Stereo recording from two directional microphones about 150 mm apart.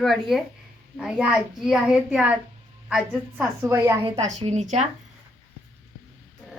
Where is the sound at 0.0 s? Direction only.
Centre (ahead or behind).